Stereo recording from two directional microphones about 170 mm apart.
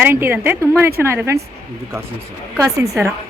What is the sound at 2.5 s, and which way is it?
Speech, 15° right (ahead or behind).